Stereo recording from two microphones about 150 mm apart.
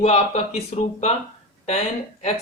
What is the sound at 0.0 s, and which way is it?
Speech, 45° left (ahead or behind).